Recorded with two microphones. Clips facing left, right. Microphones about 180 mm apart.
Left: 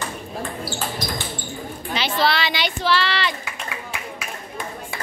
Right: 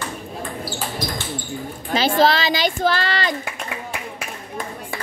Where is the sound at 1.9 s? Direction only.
45° right (ahead or behind).